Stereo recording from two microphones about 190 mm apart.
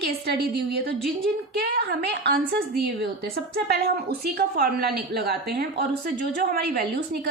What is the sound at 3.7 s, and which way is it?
A woman's voice, 55° right (ahead or behind).